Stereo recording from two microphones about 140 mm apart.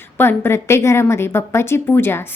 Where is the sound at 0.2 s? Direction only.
15° left (ahead or behind).